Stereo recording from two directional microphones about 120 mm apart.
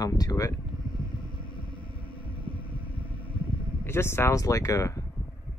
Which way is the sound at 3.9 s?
20° left (ahead or behind).